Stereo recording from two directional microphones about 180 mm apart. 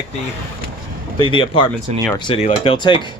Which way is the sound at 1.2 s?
30° left (ahead or behind).